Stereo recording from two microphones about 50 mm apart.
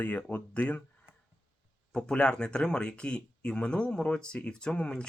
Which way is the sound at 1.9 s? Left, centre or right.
Centre.